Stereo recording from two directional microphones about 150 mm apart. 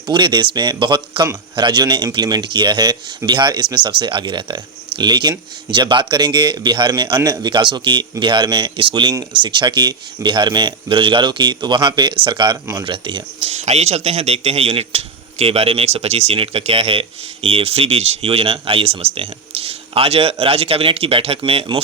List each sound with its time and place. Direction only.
0.1 s a man's voice: 30° right (ahead or behind)